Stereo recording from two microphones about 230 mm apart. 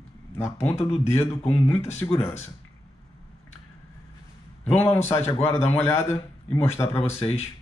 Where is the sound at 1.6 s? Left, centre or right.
Centre.